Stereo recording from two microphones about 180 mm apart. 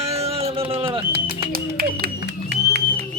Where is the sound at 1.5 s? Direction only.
55° right (ahead or behind).